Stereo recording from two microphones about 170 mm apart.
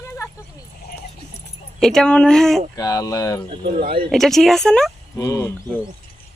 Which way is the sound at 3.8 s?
60° right (ahead or behind).